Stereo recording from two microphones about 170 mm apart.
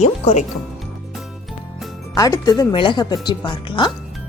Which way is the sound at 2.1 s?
20° left (ahead or behind).